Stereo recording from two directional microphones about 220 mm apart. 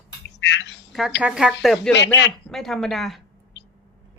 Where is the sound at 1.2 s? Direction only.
5° right (ahead or behind).